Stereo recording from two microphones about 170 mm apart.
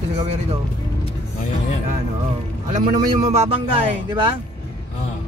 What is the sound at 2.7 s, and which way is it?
Speech, 40° right (ahead or behind).